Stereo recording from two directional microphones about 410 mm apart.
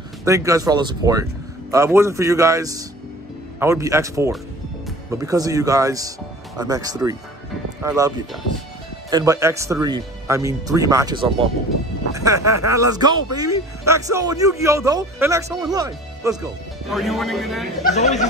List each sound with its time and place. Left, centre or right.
0.2 s a man's voice: centre
17.8 s speech: centre